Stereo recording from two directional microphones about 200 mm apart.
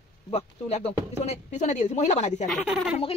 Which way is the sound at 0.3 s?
35° left (ahead or behind).